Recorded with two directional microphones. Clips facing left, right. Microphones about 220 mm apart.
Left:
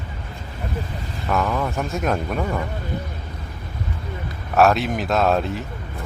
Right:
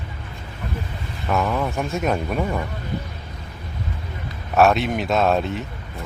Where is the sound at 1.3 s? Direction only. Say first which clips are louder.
Even; 5° right (ahead or behind).